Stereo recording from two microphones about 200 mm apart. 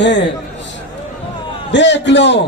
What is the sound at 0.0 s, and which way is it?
Speech, 60° left (ahead or behind).